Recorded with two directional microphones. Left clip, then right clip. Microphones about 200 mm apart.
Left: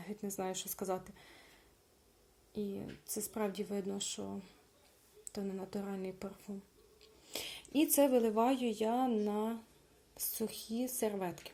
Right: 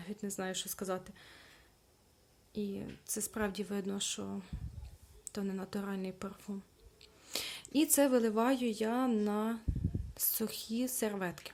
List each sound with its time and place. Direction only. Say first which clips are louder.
0.0 s speech: even; 30° right (ahead or behind)
2.5 s speech: right 1 dB; 30° right (ahead or behind)